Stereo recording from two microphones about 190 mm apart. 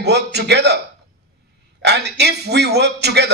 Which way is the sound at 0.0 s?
60° right (ahead or behind).